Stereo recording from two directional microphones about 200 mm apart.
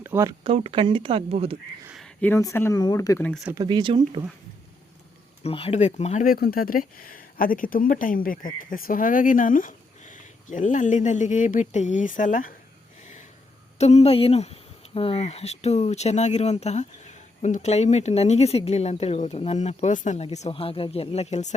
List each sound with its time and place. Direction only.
0.0 s speech: 15° right (ahead or behind)
0.4 s speech: 30° right (ahead or behind)
1.9 s speech: centre (ahead or behind)
3.5 s speech: 20° right (ahead or behind)
5.4 s speech: 30° left (ahead or behind)
13.7 s speech: 30° left (ahead or behind)